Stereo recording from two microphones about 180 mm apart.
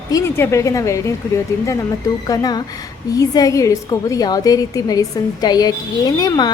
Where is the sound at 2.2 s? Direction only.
20° left (ahead or behind).